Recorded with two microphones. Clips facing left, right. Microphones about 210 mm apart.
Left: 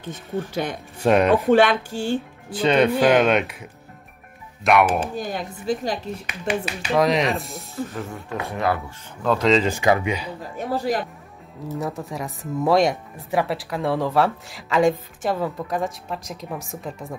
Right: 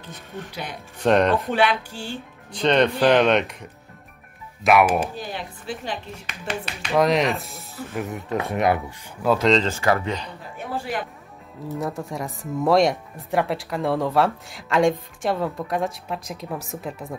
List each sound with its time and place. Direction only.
1.0 s speech: 5° left (ahead or behind)
1.5 s speech: 45° left (ahead or behind)
2.5 s speech: 5° left (ahead or behind)
4.6 s speech: centre (ahead or behind)
5.1 s speech: 45° left (ahead or behind)
6.4 s speech: 5° left (ahead or behind)
7.9 s speech: 20° right (ahead or behind)
9.2 s speech: 5° right (ahead or behind)
9.7 s speech: 15° left (ahead or behind)
10.6 s speech: 40° left (ahead or behind)
11.8 s speech: centre (ahead or behind)